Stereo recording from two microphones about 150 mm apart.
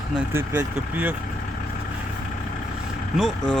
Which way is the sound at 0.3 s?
15° right (ahead or behind).